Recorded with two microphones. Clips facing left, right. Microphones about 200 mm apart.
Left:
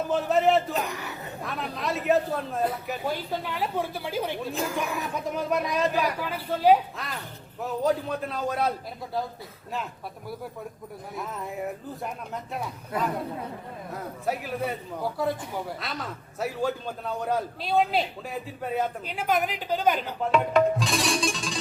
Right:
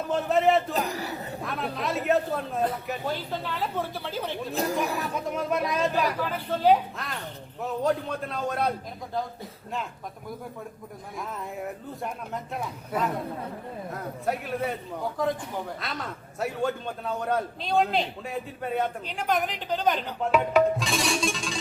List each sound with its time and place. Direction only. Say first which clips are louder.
0.1 s speech: even; centre (ahead or behind)
0.7 s speech: right 1 dB; 35° right (ahead or behind)
1.4 s speech: right 1 dB; centre (ahead or behind)
4.5 s speech: right 6 dB; 35° right (ahead or behind)
4.9 s speech: even; centre (ahead or behind)
11.2 s speech: left 1 dB; centre (ahead or behind)